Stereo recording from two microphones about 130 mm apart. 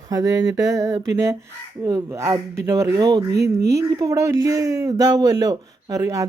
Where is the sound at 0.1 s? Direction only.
30° right (ahead or behind).